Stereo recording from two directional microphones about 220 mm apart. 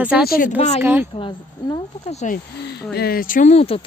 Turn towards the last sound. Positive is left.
turn(degrees=30)  # may be behind; listen again after turning